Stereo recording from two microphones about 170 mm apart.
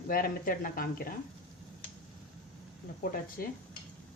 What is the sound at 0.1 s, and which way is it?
Speech, 55° left (ahead or behind).